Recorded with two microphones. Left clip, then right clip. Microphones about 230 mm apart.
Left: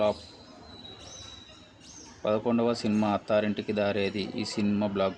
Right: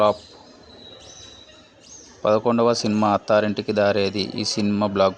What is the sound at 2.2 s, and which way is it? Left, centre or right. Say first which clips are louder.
Speech: right 9 dB; right.